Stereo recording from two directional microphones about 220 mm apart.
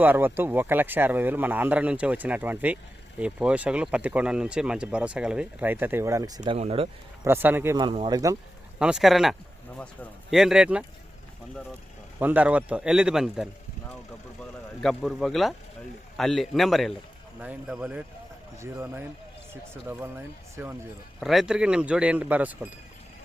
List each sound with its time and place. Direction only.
0.0 s speech: 10° right (ahead or behind); by 6.8 s 25° right (ahead or behind)
7.3 s speech: 10° right (ahead or behind)
8.8 s speech: 5° right (ahead or behind)
12.2 s speech: 5° right (ahead or behind)
14.8 s speech: centre (ahead or behind)
21.2 s speech: centre (ahead or behind)